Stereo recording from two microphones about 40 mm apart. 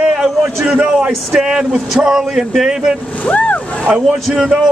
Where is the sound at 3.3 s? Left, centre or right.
Left.